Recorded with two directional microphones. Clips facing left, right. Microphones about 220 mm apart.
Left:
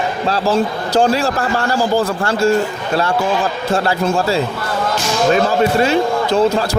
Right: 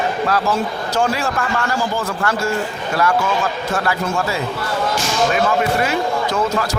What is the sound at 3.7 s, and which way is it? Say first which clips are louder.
Speech: left 6 dB; 30° left (ahead or behind).